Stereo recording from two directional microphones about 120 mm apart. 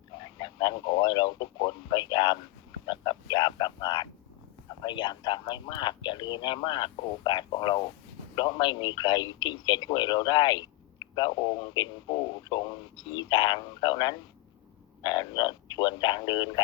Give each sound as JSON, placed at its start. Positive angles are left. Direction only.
{"t": 0.3, "sound": "speech", "side_deg": 40}